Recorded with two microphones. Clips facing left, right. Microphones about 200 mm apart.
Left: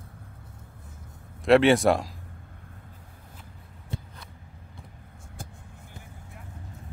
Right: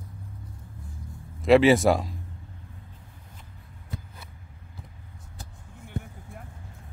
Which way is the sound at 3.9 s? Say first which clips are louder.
Left 2 dB; 25° left (ahead or behind).